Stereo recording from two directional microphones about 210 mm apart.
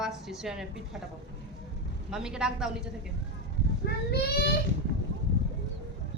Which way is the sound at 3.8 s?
50° left (ahead or behind).